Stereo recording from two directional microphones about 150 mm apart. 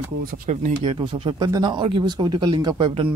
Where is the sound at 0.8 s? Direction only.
35° right (ahead or behind).